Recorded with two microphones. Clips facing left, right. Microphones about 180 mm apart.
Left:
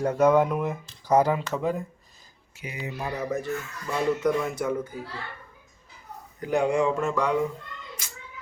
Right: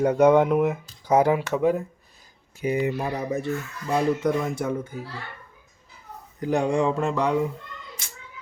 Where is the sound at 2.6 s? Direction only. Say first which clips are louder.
Right 14 dB; 40° right (ahead or behind).